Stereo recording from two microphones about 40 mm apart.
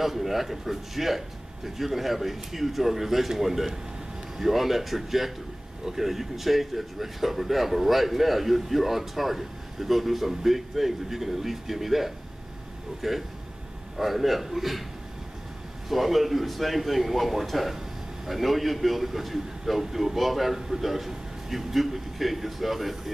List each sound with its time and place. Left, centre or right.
0.0 s speech: centre
15.9 s speech: centre